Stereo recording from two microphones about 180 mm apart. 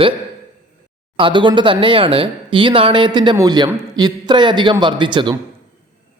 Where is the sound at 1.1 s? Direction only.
25° right (ahead or behind).